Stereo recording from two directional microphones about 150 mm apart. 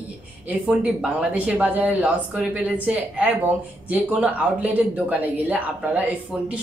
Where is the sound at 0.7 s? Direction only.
5° right (ahead or behind).